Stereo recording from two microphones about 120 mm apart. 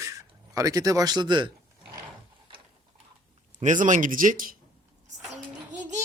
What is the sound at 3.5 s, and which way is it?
Speech, 90° right.